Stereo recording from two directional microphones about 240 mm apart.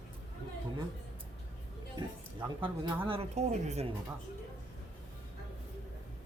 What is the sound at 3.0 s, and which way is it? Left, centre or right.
Speech, right.